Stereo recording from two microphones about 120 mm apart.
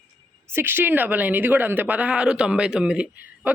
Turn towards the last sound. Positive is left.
turn(degrees=-10)  # may be behind; listen again after turning